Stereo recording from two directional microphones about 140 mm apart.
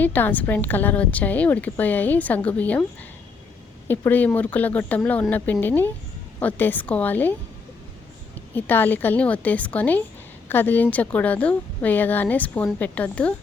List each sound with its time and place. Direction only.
0.0 s a woman's voice: 15° left (ahead or behind)
3.8 s a woman's voice: 15° left (ahead or behind)
8.5 s a woman's voice: 15° left (ahead or behind)